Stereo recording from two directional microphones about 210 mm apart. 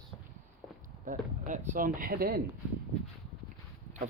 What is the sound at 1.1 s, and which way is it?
Speech, 35° right (ahead or behind).